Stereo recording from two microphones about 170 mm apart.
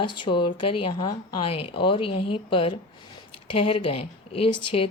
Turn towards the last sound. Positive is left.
turn(degrees=35)  # may be behind; listen again after turning